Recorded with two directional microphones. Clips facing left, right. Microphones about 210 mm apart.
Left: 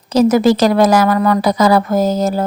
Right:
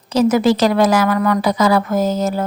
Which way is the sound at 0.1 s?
40° left (ahead or behind).